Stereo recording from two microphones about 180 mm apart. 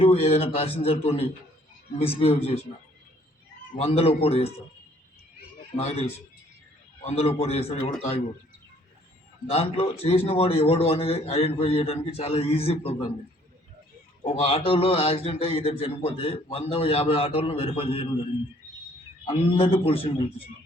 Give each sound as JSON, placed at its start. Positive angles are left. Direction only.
{"t": 0.0, "sound": "a man's voice", "side_deg": 35}
{"t": 3.8, "sound": "a man's voice", "side_deg": 35}
{"t": 5.7, "sound": "a man's voice", "side_deg": 35}
{"t": 9.5, "sound": "a man's voice", "side_deg": 35}
{"t": 14.3, "sound": "a man's voice", "side_deg": 30}
{"t": 19.2, "sound": "a man's voice", "side_deg": 30}